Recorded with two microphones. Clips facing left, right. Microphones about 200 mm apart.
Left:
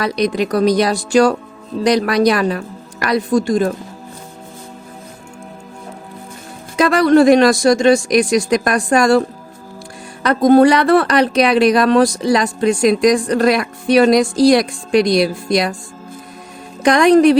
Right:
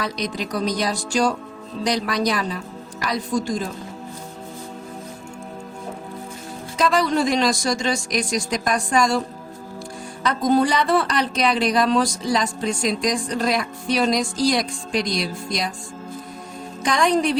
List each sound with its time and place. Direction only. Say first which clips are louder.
0.0 s speech: left 9 dB; 65° left (ahead or behind)
6.7 s speech: left 9 dB; 65° left (ahead or behind)
10.2 s speech: left 9 dB; 70° left (ahead or behind)
16.8 s speech: left 10 dB; 70° left (ahead or behind)